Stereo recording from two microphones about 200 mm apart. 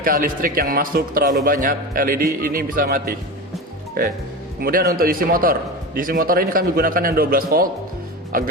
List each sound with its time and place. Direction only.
0.0 s a man's voice: 45° right (ahead or behind)
4.6 s a man's voice: 50° right (ahead or behind)